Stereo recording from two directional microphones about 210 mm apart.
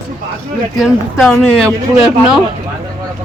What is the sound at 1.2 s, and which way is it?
Speech, 5° left (ahead or behind).